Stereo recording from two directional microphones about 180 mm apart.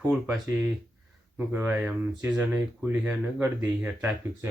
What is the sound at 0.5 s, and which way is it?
Speech, 15° right (ahead or behind).